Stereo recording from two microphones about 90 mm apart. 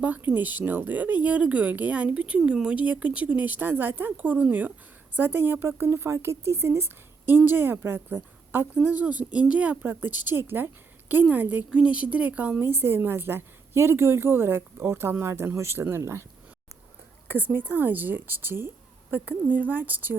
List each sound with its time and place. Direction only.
0.3 s a woman's voice: 20° right (ahead or behind)
17.2 s a woman's voice: 20° right (ahead or behind)